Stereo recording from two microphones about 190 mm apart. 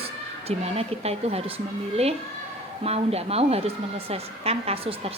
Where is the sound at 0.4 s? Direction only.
30° right (ahead or behind).